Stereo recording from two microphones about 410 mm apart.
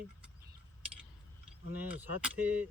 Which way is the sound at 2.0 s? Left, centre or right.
Centre.